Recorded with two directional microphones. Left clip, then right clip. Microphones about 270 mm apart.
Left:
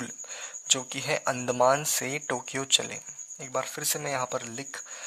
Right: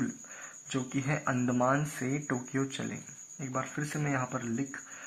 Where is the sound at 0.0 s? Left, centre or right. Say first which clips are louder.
Left 1 dB; left.